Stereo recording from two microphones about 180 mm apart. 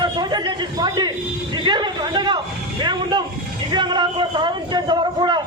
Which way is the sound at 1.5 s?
25° right (ahead or behind).